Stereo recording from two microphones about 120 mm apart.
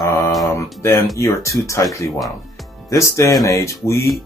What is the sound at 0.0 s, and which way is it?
Mantra, 30° left (ahead or behind).